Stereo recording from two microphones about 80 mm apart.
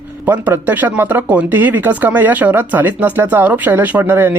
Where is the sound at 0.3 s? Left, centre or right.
Right.